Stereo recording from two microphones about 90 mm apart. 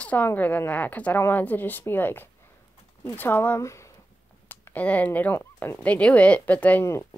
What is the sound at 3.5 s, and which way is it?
Speech, 35° left (ahead or behind).